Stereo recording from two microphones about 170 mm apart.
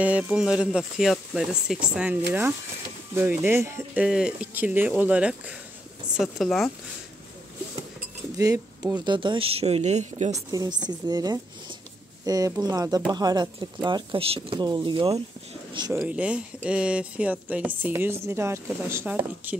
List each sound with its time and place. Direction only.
0.0 s speech: 5° right (ahead or behind)
8.4 s speech: 20° right (ahead or behind); by 10.4 s 40° right (ahead or behind)
10.5 s speech: 25° right (ahead or behind)
15.9 s speech: 10° right (ahead or behind)